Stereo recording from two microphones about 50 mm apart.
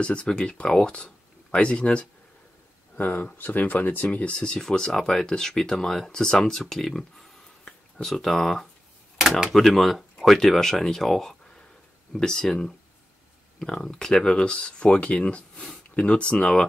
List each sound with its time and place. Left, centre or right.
0.0 s speech: left
3.0 s speech: left; by 16.6 s centre